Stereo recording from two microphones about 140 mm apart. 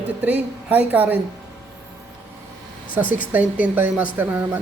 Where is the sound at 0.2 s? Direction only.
10° right (ahead or behind).